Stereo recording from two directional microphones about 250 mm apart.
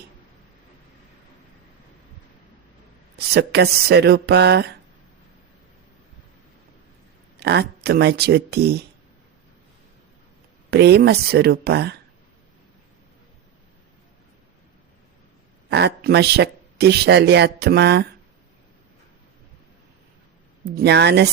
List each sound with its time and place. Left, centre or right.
3.2 s speech: right
7.3 s speech: right
10.7 s speech: right
15.7 s speech: right
20.7 s speech: right